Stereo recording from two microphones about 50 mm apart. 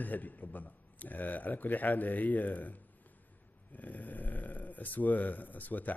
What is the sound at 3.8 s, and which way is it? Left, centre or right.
Speech, left.